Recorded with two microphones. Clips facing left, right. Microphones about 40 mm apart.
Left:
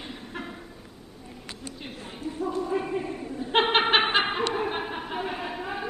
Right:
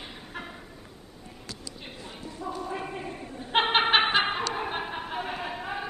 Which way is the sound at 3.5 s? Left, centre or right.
Centre.